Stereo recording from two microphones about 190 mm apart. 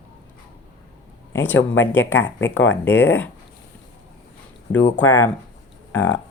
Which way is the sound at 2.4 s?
90° left.